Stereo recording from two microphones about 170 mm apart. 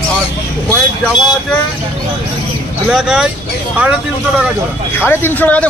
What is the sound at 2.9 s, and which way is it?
Speech, 5° right (ahead or behind).